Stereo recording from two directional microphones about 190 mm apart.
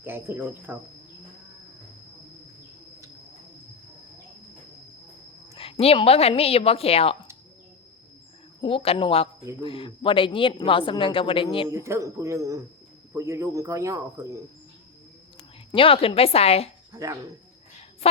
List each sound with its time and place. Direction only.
0.0 s speech: 10° right (ahead or behind)
5.5 s a woman's voice: 30° left (ahead or behind)
8.6 s speech: 30° left (ahead or behind)
11.7 s speech: 15° right (ahead or behind)
15.7 s a woman's voice: 30° left (ahead or behind)
16.9 s speech: 15° right (ahead or behind)
18.0 s a woman's voice: 30° left (ahead or behind)